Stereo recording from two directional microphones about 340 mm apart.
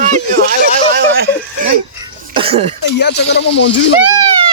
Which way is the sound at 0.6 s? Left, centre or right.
Right.